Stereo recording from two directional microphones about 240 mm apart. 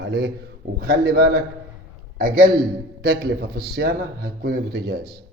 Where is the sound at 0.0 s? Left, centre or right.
Right.